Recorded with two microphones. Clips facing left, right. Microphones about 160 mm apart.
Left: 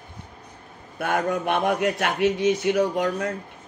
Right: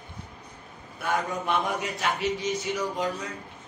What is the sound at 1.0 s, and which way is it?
A man's voice, 60° left (ahead or behind).